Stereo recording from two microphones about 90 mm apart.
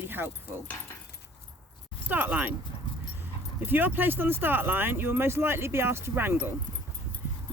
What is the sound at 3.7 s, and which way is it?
Speech, 20° right (ahead or behind).